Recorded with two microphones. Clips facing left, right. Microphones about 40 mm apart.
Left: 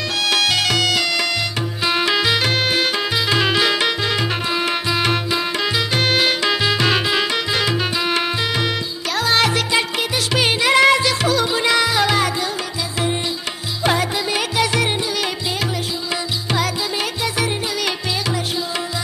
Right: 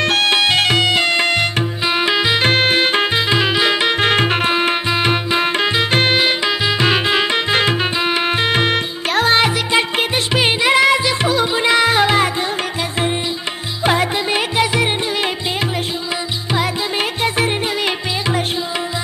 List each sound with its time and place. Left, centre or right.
0.0 s music: right
0.3 s music: right
1.9 s music: centre
2.4 s music: right
3.3 s music: centre
4.0 s music: right
6.1 s music: centre
7.1 s music: right
10.3 s music: centre
13.9 s music: right